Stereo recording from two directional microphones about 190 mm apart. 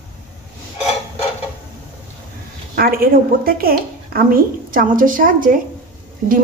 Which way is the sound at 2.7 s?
50° right (ahead or behind).